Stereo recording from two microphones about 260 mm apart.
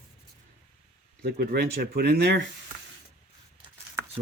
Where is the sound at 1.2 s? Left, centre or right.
Right.